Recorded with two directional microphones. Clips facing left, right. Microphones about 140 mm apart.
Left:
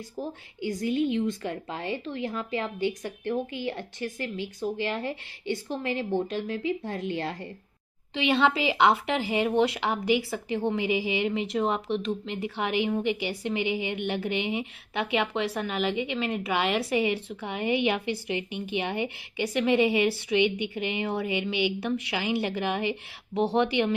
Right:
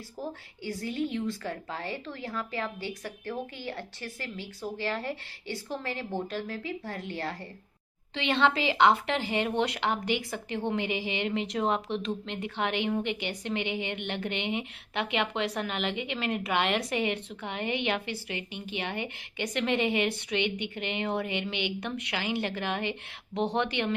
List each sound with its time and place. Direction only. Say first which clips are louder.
0.6 s a woman's voice: left 6 dB; 15° left (ahead or behind)